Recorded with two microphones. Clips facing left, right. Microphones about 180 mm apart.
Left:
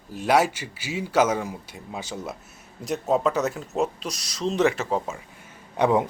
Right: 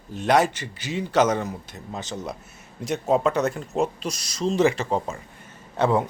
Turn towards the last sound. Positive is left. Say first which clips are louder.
# left 1 dB
turn(degrees=15)  # may be behind; listen again after turning